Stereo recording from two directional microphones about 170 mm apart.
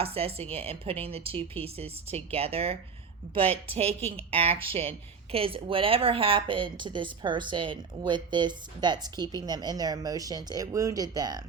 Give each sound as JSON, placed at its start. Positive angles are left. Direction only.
{"t": 0.0, "sound": "a woman's voice", "side_deg": -35}